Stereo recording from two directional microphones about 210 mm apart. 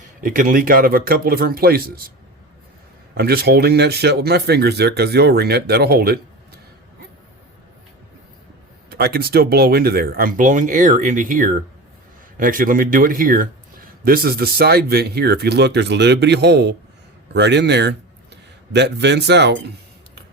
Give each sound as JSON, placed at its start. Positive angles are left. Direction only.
{"t": 0.2, "sound": "speech", "side_deg": -40}
{"t": 3.2, "sound": "speech", "side_deg": -50}
{"t": 8.9, "sound": "speech", "side_deg": -50}